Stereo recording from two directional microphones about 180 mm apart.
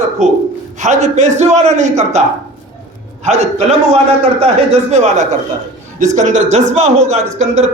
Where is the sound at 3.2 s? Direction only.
35° right (ahead or behind).